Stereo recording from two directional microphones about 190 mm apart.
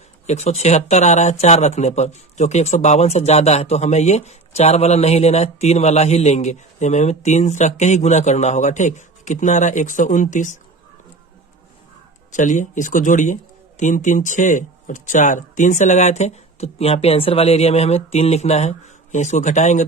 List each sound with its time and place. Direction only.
0.3 s speech: 35° left (ahead or behind)
12.3 s speech: 40° left (ahead or behind)